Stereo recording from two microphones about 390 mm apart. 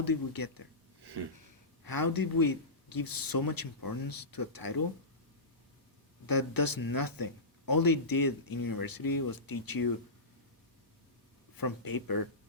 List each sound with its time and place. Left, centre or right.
0.0 s speech: left
1.0 s a sound: right
1.8 s speech: left
6.2 s speech: left
11.5 s speech: left